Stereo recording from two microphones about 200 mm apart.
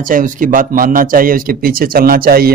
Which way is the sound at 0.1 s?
40° right (ahead or behind).